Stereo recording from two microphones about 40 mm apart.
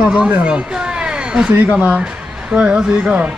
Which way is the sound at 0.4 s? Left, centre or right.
Right.